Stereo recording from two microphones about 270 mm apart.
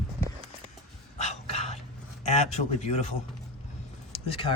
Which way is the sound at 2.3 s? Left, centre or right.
Left.